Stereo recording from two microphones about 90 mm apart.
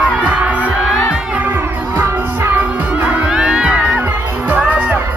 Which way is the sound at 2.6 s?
15° right (ahead or behind).